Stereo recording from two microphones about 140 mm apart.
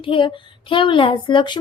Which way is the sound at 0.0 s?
35° left (ahead or behind).